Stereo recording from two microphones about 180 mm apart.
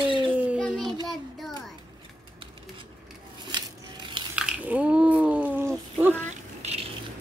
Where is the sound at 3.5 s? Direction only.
25° right (ahead or behind).